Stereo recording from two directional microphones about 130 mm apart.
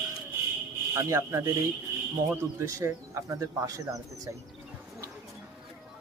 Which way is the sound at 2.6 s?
25° right (ahead or behind).